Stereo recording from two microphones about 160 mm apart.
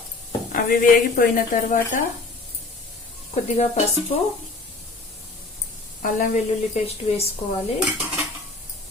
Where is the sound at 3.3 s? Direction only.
45° left (ahead or behind).